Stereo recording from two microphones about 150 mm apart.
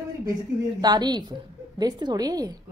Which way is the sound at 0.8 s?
30° right (ahead or behind).